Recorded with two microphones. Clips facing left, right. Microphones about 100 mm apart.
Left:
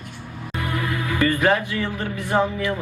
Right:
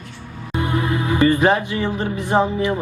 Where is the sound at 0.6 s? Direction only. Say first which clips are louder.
Right 5 dB; 25° right (ahead or behind).